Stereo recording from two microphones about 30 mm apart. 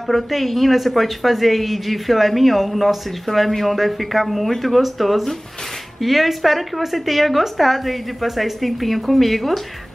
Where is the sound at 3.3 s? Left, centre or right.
Left.